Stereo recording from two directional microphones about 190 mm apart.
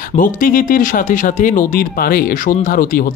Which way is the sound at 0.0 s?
45° left (ahead or behind).